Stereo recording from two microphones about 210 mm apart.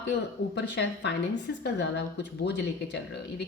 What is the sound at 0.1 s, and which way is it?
A woman's voice, 55° left (ahead or behind).